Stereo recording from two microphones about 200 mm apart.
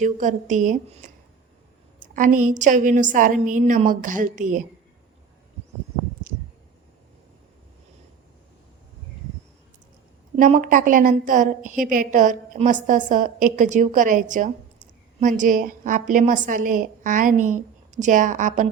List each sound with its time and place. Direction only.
0.0 s a woman's voice: 40° right (ahead or behind)
10.3 s a woman's voice: 40° right (ahead or behind)